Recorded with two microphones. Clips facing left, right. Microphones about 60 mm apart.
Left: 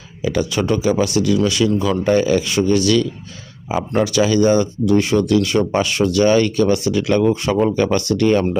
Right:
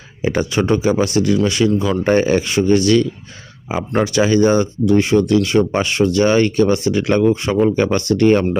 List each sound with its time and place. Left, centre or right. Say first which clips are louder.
0.2 s speech: right 2 dB; right
2.0 s speech: right 1 dB; right